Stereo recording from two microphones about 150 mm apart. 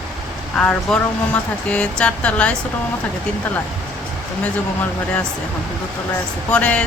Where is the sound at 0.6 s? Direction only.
10° left (ahead or behind).